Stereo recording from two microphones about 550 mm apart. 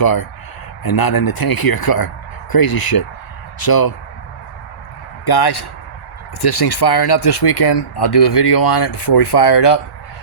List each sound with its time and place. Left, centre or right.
0.0 s speech: left
5.2 s a man's voice: left